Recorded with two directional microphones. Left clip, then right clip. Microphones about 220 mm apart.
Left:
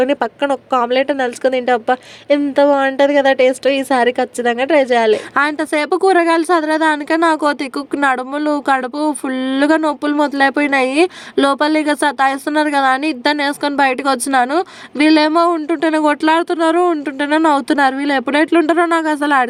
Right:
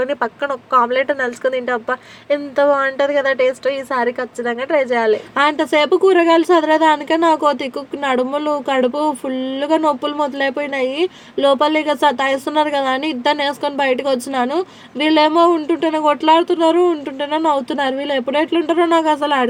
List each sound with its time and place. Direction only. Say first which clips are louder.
0.0 s speech: left 4 dB; 30° left (ahead or behind)